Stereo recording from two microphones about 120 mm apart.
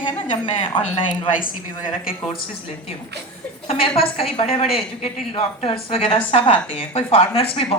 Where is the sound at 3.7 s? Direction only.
55° left (ahead or behind).